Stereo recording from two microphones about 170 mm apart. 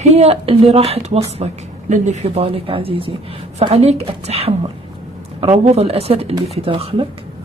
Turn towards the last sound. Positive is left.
turn(degrees=-30)  # may be behind; listen again after turning